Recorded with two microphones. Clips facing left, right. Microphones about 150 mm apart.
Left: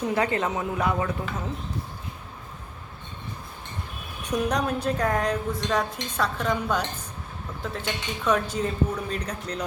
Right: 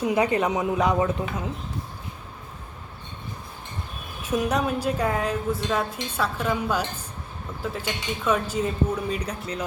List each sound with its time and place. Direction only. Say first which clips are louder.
0.0 s a man's voice: right 3 dB; 15° right (ahead or behind)
4.2 s speech: right 1 dB; 5° right (ahead or behind)